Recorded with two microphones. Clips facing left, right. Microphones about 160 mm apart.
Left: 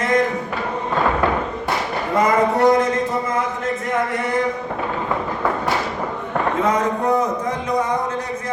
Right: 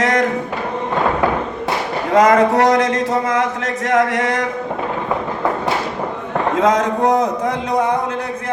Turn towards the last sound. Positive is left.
turn(degrees=-80)